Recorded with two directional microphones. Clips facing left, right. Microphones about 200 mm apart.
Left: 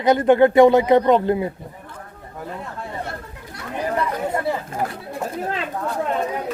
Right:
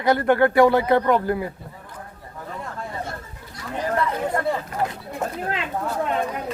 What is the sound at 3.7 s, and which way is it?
Chatter, 15° left (ahead or behind).